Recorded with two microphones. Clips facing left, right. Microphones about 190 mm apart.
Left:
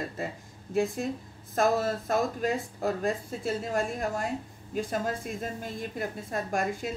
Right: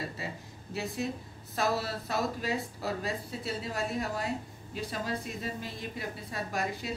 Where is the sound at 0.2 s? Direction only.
50° left (ahead or behind).